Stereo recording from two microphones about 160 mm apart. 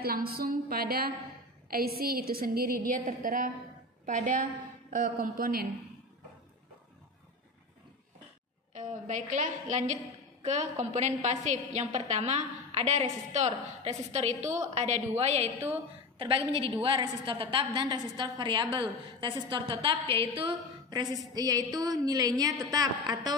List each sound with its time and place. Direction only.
0.0 s a woman's voice: 70° right (ahead or behind)
8.7 s a woman's voice: 50° right (ahead or behind)
16.2 s a woman's voice: 30° right (ahead or behind)